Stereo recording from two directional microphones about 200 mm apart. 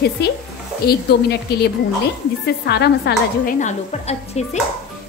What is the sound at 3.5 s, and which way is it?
Speech, 35° left (ahead or behind).